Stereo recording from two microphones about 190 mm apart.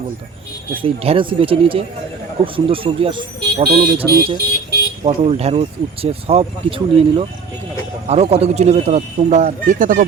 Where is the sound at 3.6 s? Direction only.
55° right (ahead or behind).